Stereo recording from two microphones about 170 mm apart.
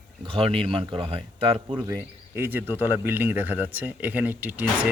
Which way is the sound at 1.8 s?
15° right (ahead or behind).